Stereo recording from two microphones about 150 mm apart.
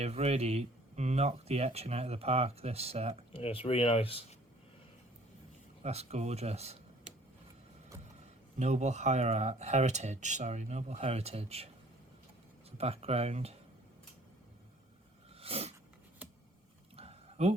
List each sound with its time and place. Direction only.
0.0 s speech: 45° right (ahead or behind)
3.3 s speech: 35° left (ahead or behind)
5.8 s speech: 45° right (ahead or behind)
8.5 s speech: 50° right (ahead or behind)
12.7 s speech: 45° right (ahead or behind)
15.4 s a sound: 40° right (ahead or behind)
17.0 s a sound: 40° right (ahead or behind)